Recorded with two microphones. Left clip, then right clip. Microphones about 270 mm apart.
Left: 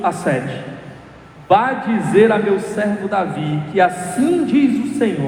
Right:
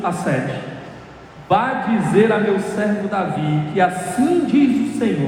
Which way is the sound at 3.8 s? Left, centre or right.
Left.